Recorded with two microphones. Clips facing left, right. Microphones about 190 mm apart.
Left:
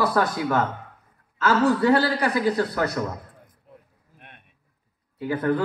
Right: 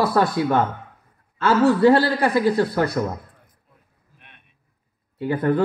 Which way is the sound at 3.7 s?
75° left (ahead or behind).